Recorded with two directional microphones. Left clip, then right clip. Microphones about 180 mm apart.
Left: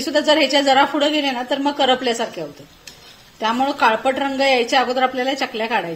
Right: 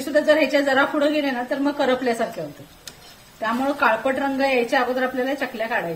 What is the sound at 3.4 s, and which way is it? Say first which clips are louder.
A woman's voice: left 3 dB; 50° left (ahead or behind).